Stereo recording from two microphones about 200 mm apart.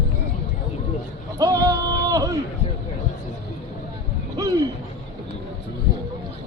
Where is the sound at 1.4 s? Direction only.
20° right (ahead or behind).